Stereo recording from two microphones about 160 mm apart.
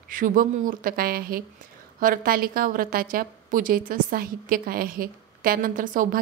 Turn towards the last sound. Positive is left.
turn(degrees=-60)  # may be behind; listen again after turning